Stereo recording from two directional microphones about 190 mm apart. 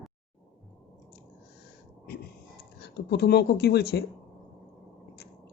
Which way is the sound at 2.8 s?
60° left (ahead or behind).